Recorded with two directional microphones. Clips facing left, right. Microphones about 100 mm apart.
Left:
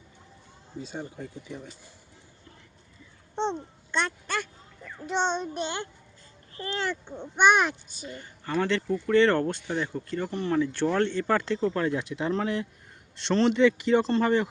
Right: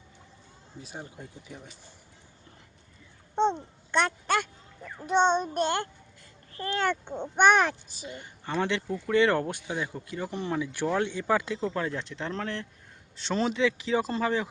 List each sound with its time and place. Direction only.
0.8 s speech: 10° right (ahead or behind)
3.9 s a sound: 60° right (ahead or behind)
5.0 s child singing: 50° right (ahead or behind)
7.1 s a child's voice: 60° right (ahead or behind)
8.0 s speech: 20° right (ahead or behind)
11.9 s speech: 10° left (ahead or behind)
13.1 s speech: 5° right (ahead or behind)